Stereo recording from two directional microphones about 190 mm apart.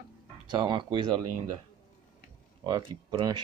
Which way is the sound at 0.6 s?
25° right (ahead or behind).